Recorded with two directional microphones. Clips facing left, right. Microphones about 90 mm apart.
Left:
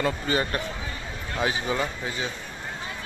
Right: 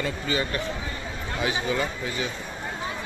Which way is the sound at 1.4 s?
30° left (ahead or behind).